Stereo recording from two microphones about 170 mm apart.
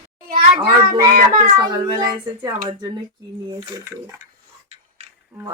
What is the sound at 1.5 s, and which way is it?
Speech, 25° right (ahead or behind).